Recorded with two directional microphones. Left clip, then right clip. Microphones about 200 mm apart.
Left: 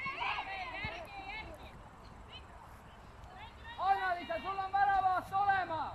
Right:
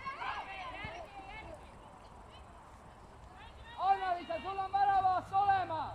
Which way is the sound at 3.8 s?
10° right (ahead or behind).